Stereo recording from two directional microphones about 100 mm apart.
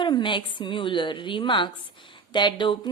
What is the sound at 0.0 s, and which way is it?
A woman's voice, 50° left (ahead or behind).